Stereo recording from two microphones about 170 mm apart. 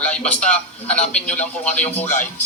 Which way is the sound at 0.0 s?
5° left (ahead or behind).